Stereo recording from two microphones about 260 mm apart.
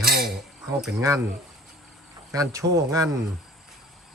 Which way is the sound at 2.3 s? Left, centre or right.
Centre.